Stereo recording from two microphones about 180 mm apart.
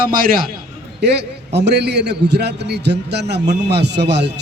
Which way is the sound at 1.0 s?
70° right (ahead or behind).